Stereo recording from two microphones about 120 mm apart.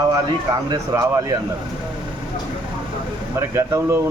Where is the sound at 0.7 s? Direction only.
30° right (ahead or behind).